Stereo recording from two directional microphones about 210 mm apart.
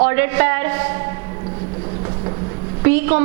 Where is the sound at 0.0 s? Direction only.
10° right (ahead or behind).